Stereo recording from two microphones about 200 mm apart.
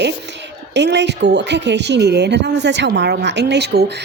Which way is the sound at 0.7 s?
60° right (ahead or behind).